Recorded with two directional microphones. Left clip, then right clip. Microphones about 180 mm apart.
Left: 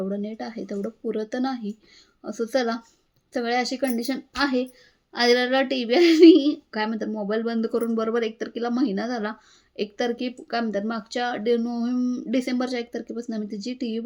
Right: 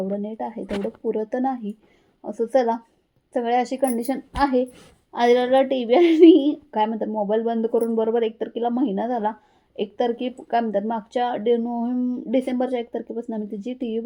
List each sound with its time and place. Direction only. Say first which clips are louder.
0.2 s a woman's voice: right 3 dB; 20° left (ahead or behind)